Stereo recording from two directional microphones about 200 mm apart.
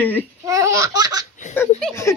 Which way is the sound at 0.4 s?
15° right (ahead or behind).